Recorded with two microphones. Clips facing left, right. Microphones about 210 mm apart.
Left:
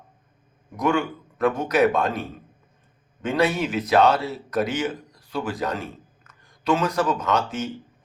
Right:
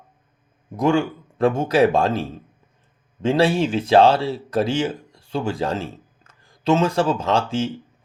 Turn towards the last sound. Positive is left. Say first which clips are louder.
# right 3 dB
turn(degrees=-30)  # may be behind; listen again after turning